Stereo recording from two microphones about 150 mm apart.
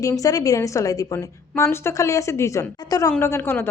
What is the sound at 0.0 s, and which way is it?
A woman's voice, 20° left (ahead or behind).